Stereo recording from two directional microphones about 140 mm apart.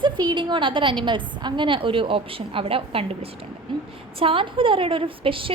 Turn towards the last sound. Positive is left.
turn(degrees=-40)  # may be behind; listen again after turning